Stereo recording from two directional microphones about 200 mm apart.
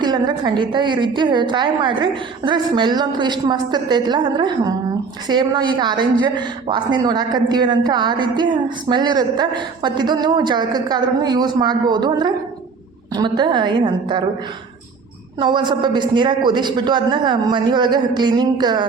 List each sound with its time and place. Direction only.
0.0 s a woman's voice: 20° right (ahead or behind)
15.4 s a woman's voice: 25° right (ahead or behind)